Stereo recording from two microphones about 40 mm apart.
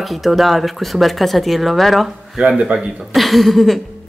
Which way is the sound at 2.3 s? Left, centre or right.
Right.